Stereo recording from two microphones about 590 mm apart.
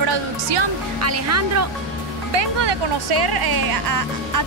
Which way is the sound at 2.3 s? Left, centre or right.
Right.